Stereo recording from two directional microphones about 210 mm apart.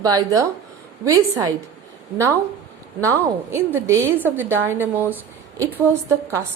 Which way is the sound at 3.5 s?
15° right (ahead or behind).